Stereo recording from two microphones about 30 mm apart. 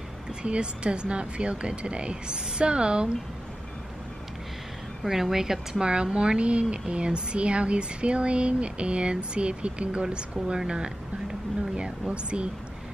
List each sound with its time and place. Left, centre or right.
0.4 s speech: right
5.0 s speech: centre
5.9 s speech: right
10.6 s speech: right
12.1 s speech: right